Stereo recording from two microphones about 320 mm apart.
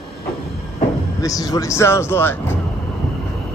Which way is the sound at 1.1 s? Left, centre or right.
Centre.